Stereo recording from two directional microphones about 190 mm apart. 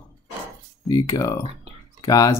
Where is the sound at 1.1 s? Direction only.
15° left (ahead or behind).